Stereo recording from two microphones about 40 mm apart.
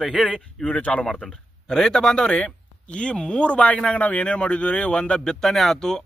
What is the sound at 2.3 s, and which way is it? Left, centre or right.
Speech, left.